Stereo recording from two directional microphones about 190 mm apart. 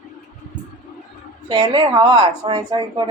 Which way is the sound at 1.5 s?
20° right (ahead or behind).